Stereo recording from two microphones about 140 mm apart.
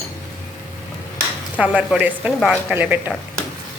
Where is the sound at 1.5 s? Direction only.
10° right (ahead or behind).